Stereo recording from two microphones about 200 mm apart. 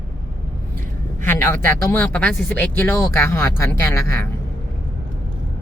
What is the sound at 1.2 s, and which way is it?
Speech, 10° left (ahead or behind).